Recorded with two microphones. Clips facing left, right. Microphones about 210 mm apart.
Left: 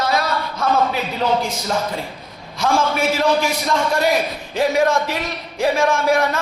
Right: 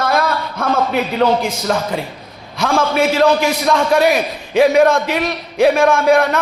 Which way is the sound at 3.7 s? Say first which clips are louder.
Right 5 dB; 70° right (ahead or behind).